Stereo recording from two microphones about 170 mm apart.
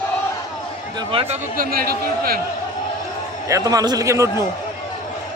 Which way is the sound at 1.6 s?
60° right (ahead or behind).